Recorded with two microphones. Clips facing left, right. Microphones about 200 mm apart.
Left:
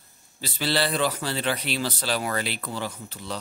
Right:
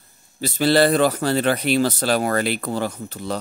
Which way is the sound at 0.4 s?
45° right (ahead or behind).